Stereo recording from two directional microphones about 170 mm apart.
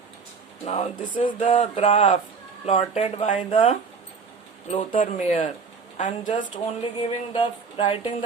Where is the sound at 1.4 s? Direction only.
45° left (ahead or behind).